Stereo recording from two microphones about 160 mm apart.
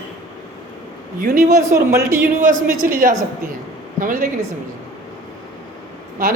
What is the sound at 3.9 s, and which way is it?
Speech, 55° right (ahead or behind).